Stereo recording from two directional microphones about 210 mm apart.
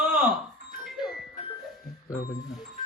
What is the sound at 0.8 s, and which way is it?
Music, centre (ahead or behind).